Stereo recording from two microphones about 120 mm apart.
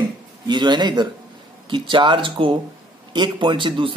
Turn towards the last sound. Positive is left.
turn(degrees=-45)  # may be behind; listen again after turning